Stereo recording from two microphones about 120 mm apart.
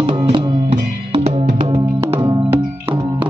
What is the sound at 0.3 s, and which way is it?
Music, 50° right (ahead or behind).